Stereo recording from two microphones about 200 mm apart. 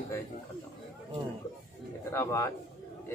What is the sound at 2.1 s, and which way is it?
Speech, 15° left (ahead or behind).